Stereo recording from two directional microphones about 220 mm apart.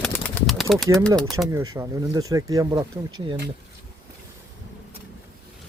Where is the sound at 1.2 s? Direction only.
Centre (ahead or behind).